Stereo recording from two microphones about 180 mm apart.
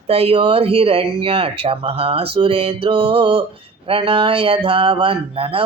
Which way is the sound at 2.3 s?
30° right (ahead or behind).